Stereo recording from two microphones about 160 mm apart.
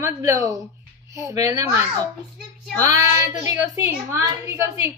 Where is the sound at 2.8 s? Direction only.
45° left (ahead or behind).